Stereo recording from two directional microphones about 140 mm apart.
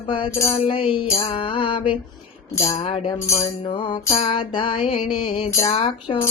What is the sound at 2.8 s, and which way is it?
Mantra, 40° left (ahead or behind).